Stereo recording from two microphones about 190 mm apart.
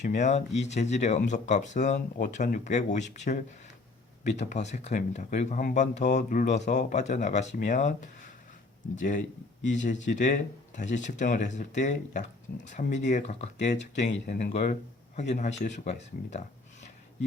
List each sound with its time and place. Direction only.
0.0 s speech: 40° left (ahead or behind)